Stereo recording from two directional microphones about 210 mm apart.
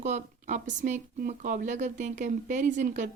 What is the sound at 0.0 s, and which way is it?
Speech, 35° right (ahead or behind).